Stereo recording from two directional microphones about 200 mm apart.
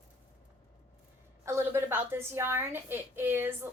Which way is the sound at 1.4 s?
15° right (ahead or behind).